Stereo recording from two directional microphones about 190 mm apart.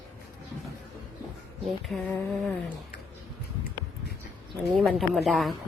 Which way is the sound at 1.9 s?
Centre (ahead or behind).